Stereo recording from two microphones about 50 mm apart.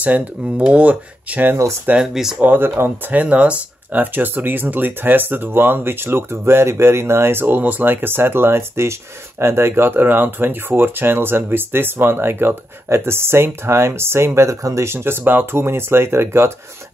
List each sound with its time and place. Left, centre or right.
0.0 s speech: right
2.0 s speech: centre
2.4 s speech: right
3.1 s speech: right
4.0 s speech: right
15.2 s speech: right